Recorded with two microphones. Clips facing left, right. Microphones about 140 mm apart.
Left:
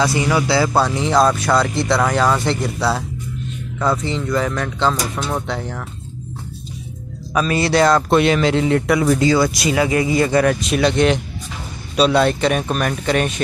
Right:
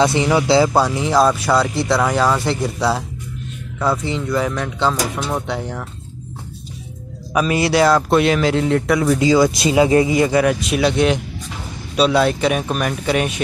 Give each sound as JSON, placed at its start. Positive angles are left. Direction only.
{"t": 0.0, "sound": "speech", "side_deg": -25}
{"t": 7.3, "sound": "speech", "side_deg": -15}
{"t": 9.2, "sound": "speech", "side_deg": -15}
{"t": 9.6, "sound": "speech", "side_deg": -25}
{"t": 10.1, "sound": "speech", "side_deg": -10}